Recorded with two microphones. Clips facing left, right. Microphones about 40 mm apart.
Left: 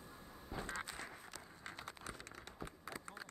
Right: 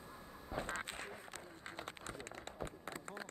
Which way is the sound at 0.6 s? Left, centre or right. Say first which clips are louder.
Right 2 dB; right.